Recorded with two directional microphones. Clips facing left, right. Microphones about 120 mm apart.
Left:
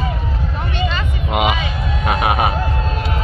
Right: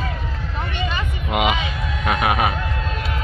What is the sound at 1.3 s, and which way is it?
Music, 25° left (ahead or behind).